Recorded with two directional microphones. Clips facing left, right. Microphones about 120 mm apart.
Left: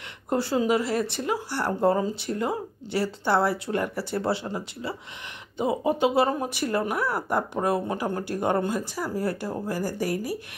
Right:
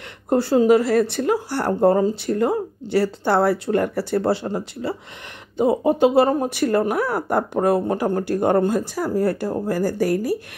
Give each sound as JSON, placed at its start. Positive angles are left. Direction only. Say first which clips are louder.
{"t": 0.3, "sound": "speech", "louder": "right 8 dB", "side_deg": -35}